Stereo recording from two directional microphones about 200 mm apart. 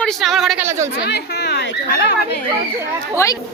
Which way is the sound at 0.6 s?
15° right (ahead or behind).